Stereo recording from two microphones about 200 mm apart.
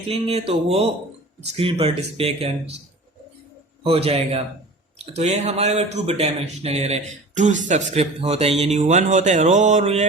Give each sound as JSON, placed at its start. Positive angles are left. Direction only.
{"t": 0.1, "sound": "speech", "side_deg": -30}
{"t": 3.8, "sound": "speech", "side_deg": -30}